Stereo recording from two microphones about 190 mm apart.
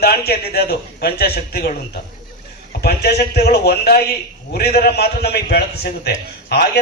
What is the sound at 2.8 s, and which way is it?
A man's voice, 55° left (ahead or behind).